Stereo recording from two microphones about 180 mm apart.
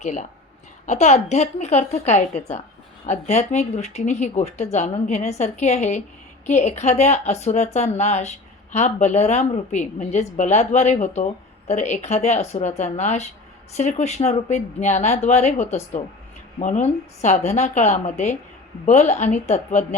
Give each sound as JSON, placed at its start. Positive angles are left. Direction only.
{"t": 0.0, "sound": "speech", "side_deg": 40}